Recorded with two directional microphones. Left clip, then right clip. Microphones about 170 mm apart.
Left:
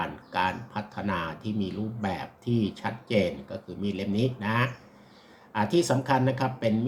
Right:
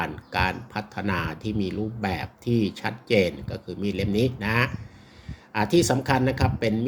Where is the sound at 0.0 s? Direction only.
45° right (ahead or behind).